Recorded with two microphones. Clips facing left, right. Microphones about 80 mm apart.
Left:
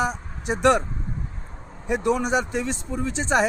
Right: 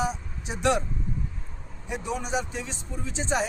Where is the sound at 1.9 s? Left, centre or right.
Left.